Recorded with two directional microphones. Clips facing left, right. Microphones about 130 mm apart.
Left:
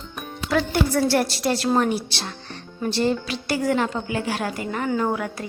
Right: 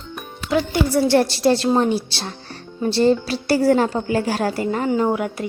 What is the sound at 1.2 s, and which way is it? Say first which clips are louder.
Speech: right 6 dB; 30° right (ahead or behind).